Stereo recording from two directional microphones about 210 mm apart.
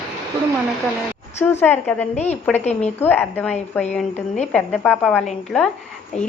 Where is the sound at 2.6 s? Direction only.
30° left (ahead or behind).